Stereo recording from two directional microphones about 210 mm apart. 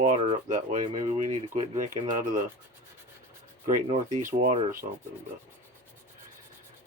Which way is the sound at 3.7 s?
30° right (ahead or behind).